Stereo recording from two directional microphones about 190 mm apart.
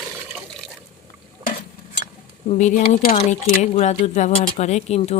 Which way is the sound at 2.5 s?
40° left (ahead or behind).